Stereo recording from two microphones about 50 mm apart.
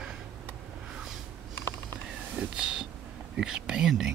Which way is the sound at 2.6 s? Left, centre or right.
Centre.